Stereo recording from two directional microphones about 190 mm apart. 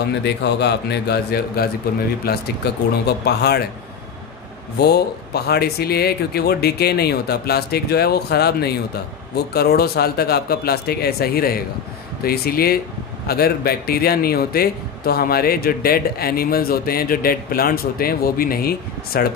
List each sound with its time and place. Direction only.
0.1 s speech: 65° left (ahead or behind)
4.7 s a man's voice: 55° left (ahead or behind)